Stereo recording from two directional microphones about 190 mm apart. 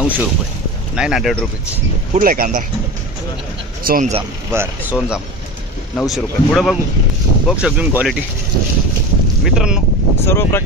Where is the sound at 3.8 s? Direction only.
45° right (ahead or behind).